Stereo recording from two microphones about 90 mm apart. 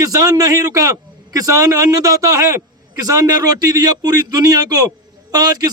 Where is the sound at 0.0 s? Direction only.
40° right (ahead or behind).